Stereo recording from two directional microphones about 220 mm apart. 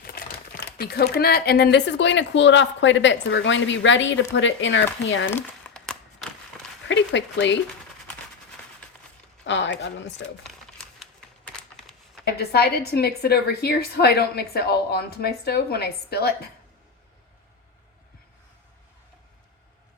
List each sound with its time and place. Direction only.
0.0 s speech: 45° left (ahead or behind)
5.3 s crumpling: 5° left (ahead or behind)
6.8 s a sound: 55° left (ahead or behind)
9.4 s speech: 55° left (ahead or behind)
10.4 s crumpling: centre (ahead or behind)
11.8 s a sound: centre (ahead or behind)
12.2 s a woman's voice: 45° left (ahead or behind)